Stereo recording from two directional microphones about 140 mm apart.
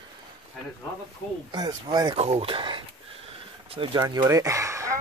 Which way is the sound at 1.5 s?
30° right (ahead or behind).